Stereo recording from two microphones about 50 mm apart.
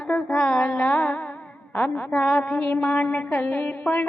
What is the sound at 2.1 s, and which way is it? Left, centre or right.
Music, left.